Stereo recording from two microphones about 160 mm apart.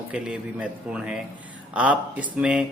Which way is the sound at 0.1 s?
5° right (ahead or behind).